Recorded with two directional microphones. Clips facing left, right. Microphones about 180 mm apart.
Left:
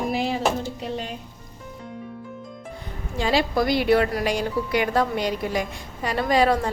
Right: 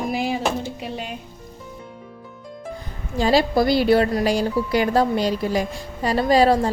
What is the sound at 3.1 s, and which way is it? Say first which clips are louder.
A woman's voice: right 4 dB; 40° right (ahead or behind).